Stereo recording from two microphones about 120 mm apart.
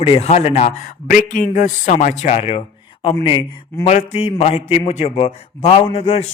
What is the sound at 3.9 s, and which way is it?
A man's voice, 65° left (ahead or behind).